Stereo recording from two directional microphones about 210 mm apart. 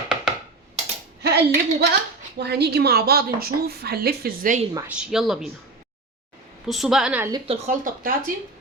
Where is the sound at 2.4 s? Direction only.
50° right (ahead or behind).